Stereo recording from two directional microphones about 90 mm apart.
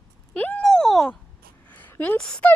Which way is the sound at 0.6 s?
5° left (ahead or behind).